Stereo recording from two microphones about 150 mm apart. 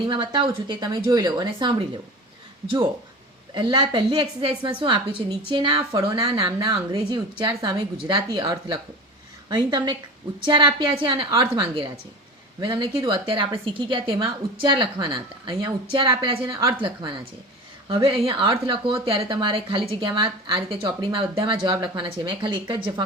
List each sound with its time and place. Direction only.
0.0 s a woman's voice: 30° right (ahead or behind)
3.5 s a woman's voice: 30° right (ahead or behind)
11.3 s a woman's voice: 20° right (ahead or behind)
16.5 s a woman's voice: 25° right (ahead or behind)